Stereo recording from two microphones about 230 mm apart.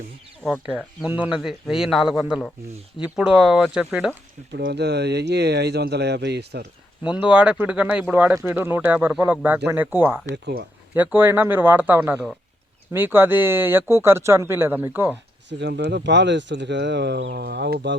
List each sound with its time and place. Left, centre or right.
0.4 s speech: centre
4.5 s speech: right
7.0 s speech: centre
10.3 s speech: right
10.9 s speech: centre
15.4 s speech: right